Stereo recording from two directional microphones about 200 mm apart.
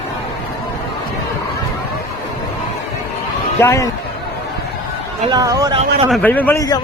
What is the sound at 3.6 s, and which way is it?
Speech, 15° left (ahead or behind).